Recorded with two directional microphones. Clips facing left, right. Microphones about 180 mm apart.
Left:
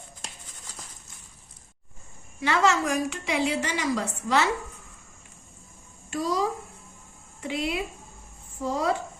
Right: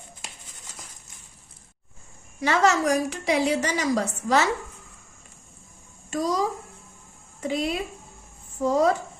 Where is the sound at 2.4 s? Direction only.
40° right (ahead or behind).